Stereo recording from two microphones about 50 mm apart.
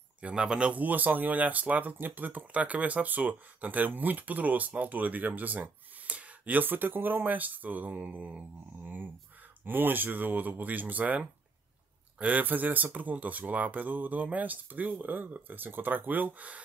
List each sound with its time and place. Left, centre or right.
0.2 s speech: centre